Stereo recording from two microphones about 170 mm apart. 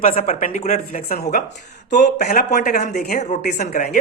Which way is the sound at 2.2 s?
45° left (ahead or behind).